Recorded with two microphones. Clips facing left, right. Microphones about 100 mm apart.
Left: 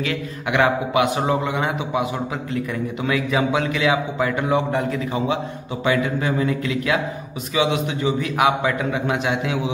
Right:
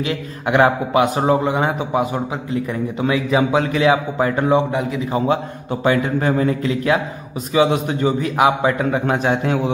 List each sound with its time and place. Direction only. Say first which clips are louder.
0.0 s a man's voice: right 3 dB; 30° right (ahead or behind)
5.9 s a man's voice: right 3 dB; 40° right (ahead or behind)